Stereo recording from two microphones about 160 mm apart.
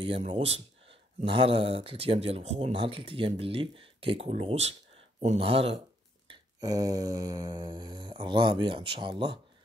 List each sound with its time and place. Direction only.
0.0 s speech: 35° right (ahead or behind)
6.2 s mantra: 25° right (ahead or behind)